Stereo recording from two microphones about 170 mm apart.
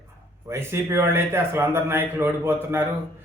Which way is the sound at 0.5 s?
15° right (ahead or behind).